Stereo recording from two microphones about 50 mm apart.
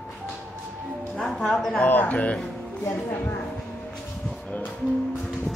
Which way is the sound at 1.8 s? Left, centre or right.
Left.